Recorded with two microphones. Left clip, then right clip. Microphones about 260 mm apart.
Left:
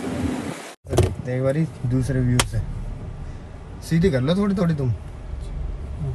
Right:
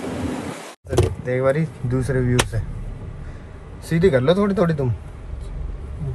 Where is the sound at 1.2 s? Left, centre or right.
Right.